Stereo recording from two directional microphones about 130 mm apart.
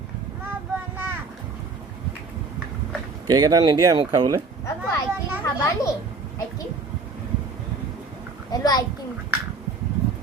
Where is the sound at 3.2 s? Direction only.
30° right (ahead or behind).